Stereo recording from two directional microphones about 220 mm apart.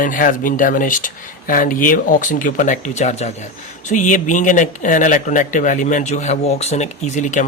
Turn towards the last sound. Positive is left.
turn(degrees=35)  # may be behind; listen again after turning